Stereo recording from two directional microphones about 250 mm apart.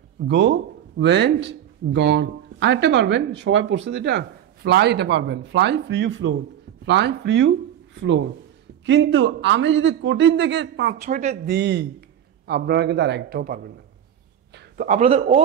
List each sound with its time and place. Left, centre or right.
0.2 s speech: right
8.8 s speech: right
11.0 s a man's voice: right
11.4 s a man's voice: right
14.5 s a sound: right
14.9 s a man's voice: right